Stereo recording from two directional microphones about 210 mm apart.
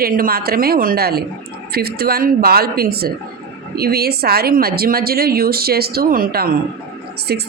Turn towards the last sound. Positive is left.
turn(degrees=-50)  # may be behind; listen again after turning